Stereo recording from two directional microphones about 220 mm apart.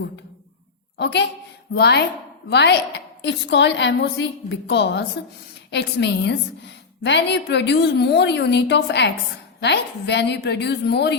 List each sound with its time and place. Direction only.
0.9 s a woman's voice: 50° left (ahead or behind)